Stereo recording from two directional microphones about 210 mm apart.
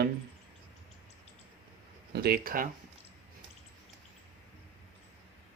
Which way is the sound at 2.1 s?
45° right (ahead or behind).